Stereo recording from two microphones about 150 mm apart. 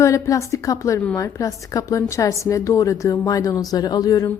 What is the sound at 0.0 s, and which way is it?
Speech, 20° left (ahead or behind).